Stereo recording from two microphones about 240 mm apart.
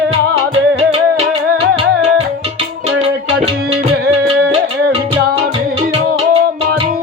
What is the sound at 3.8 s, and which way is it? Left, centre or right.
Music, right.